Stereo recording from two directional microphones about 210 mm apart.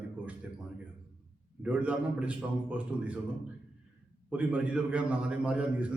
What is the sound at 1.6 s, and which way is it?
A man's voice, 5° right (ahead or behind).